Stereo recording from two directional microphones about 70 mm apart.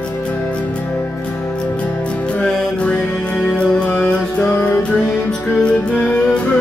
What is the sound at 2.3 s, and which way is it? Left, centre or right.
Music, centre.